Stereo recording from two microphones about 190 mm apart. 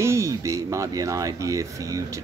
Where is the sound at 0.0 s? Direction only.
15° right (ahead or behind).